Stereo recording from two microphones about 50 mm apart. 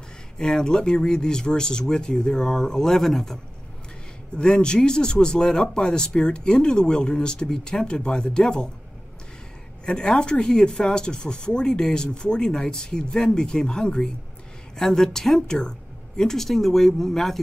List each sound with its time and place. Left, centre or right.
0.4 s speech: centre
4.4 s speech: centre
9.8 s speech: centre